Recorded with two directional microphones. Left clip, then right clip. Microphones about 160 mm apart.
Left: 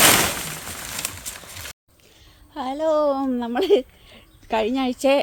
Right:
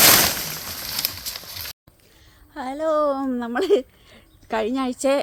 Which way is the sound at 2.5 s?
20° left (ahead or behind).